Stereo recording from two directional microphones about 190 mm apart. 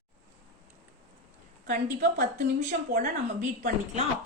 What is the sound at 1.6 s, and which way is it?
A woman's voice, 50° right (ahead or behind).